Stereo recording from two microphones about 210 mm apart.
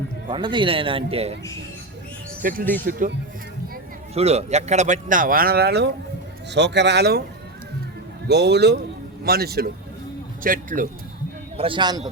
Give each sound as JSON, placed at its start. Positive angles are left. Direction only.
{"t": 0.3, "sound": "speech", "side_deg": -20}
{"t": 2.4, "sound": "speech", "side_deg": -40}
{"t": 4.1, "sound": "speech", "side_deg": -30}
{"t": 8.3, "sound": "speech", "side_deg": -55}
{"t": 11.5, "sound": "speech", "side_deg": -25}